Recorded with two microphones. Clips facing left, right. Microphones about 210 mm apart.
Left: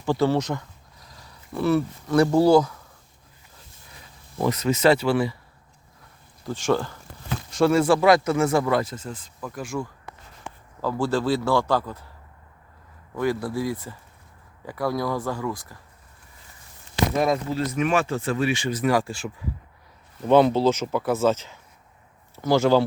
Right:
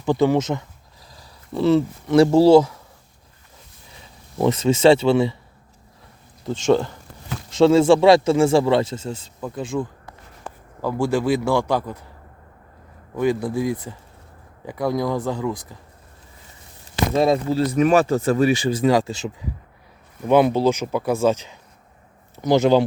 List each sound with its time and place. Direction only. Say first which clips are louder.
0.0 s speech: right 4 dB; 15° right (ahead or behind)
4.4 s speech: right 5 dB; 25° right (ahead or behind)
6.4 s speech: right 5 dB; 25° right (ahead or behind)
13.1 s speech: right 4 dB; 20° right (ahead or behind)
17.2 s speech: right 6 dB; 30° right (ahead or behind)